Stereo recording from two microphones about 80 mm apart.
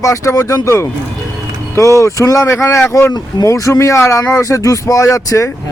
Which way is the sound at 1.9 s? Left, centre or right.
Left.